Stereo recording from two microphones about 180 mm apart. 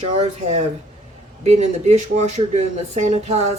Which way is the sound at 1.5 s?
40° right (ahead or behind).